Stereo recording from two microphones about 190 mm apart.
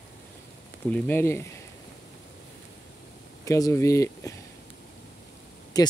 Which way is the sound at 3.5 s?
15° left (ahead or behind).